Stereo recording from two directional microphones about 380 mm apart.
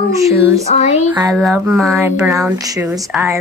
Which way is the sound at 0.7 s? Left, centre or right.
Centre.